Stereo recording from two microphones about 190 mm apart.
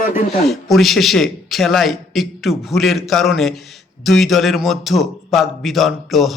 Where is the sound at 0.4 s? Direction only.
Centre (ahead or behind).